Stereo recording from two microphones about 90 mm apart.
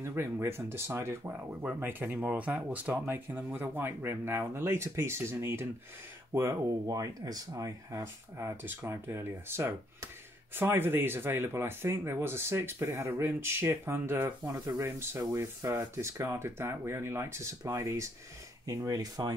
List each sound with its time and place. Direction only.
0.0 s speech: 30° right (ahead or behind); by 19.3 s 45° right (ahead or behind)